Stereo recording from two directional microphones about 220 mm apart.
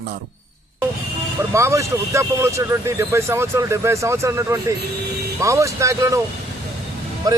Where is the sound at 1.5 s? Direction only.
15° right (ahead or behind).